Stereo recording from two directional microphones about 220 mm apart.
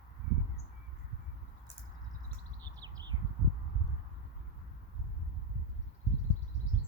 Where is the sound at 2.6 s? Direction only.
20° right (ahead or behind).